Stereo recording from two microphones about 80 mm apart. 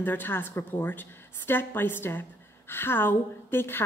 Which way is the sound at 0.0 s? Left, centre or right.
Left.